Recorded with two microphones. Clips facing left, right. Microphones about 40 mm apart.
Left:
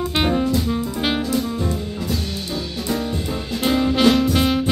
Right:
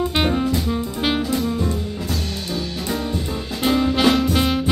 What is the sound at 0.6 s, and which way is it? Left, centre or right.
Jazz, centre.